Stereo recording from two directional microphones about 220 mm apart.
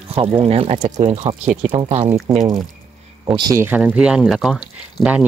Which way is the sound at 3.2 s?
15° right (ahead or behind).